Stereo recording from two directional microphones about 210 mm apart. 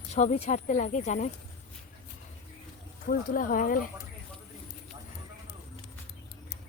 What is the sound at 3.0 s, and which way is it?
Speech, 40° left (ahead or behind).